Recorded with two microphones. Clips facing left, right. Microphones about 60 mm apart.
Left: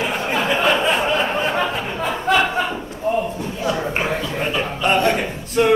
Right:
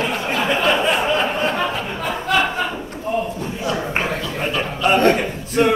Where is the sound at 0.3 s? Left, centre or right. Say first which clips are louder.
Even; centre.